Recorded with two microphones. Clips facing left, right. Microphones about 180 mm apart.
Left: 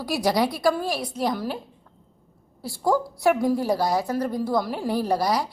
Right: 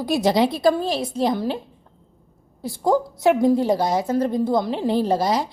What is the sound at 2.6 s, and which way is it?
A woman's voice, 20° right (ahead or behind).